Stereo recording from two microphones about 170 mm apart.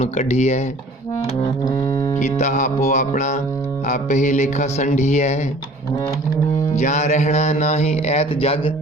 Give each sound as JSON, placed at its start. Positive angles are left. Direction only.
{"t": 0.0, "sound": "speech", "side_deg": 40}
{"t": 1.6, "sound": "music", "side_deg": 25}
{"t": 2.1, "sound": "speech", "side_deg": 45}
{"t": 6.7, "sound": "speech", "side_deg": 45}